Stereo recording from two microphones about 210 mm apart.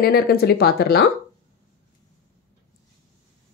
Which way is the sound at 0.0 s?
50° left (ahead or behind).